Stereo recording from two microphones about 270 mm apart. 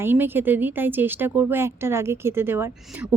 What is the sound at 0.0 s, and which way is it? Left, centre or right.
A woman's voice, centre.